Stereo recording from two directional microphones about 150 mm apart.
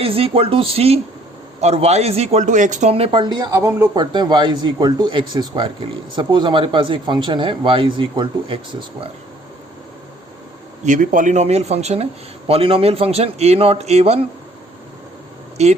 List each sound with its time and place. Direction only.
0.0 s speech: 40° right (ahead or behind); by 2.9 s 55° right (ahead or behind)
2.9 s speech: 35° right (ahead or behind)
10.8 s speech: 60° right (ahead or behind); by 14.3 s 45° right (ahead or behind)
15.6 s speech: 45° right (ahead or behind)